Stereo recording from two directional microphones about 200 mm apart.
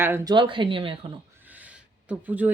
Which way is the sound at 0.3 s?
25° right (ahead or behind).